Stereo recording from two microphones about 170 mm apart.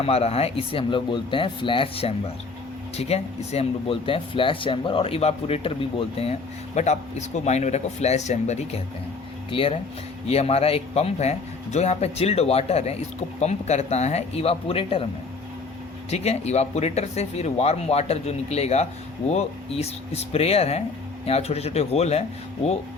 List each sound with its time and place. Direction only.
0.0 s speech: 35° left (ahead or behind)
16.0 s speech: 40° left (ahead or behind)